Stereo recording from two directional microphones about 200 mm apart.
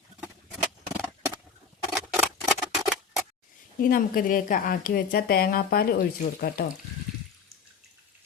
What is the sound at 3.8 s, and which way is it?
A woman's voice, 45° left (ahead or behind).